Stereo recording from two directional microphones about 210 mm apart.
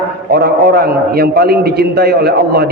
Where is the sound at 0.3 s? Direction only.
50° right (ahead or behind).